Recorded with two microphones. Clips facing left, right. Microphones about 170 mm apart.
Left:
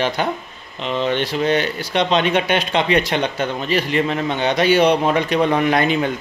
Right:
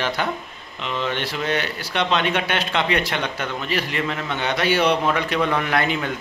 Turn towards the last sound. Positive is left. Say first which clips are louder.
# left 5 dB
turn(degrees=20)  # may be behind; listen again after turning